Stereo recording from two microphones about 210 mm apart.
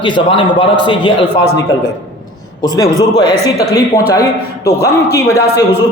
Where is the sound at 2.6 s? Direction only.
20° left (ahead or behind).